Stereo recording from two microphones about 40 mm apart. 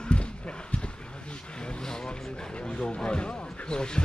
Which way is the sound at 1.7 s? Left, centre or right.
Centre.